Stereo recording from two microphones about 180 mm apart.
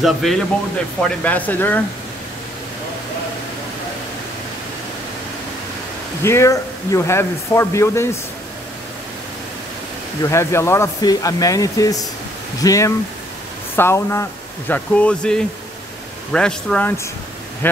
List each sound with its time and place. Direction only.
0.0 s a man's voice: centre (ahead or behind)
6.2 s a man's voice: 15° left (ahead or behind)
10.3 s a man's voice: 15° left (ahead or behind)